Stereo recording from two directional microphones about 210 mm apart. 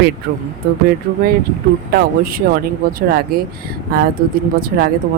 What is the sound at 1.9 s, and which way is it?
Speech, 45° right (ahead or behind).